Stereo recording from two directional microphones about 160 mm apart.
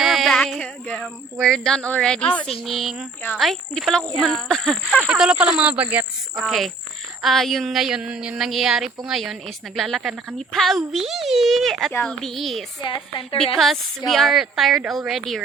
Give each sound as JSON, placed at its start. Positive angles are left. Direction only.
{"t": 0.0, "sound": "a sound", "side_deg": 0}
{"t": 2.6, "sound": "a woman's voice", "side_deg": 0}
{"t": 12.8, "sound": "a woman's voice", "side_deg": 30}
{"t": 13.6, "sound": "a woman's voice", "side_deg": 0}